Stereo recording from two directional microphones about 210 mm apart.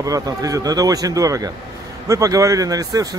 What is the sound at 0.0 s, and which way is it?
Speech, 15° right (ahead or behind).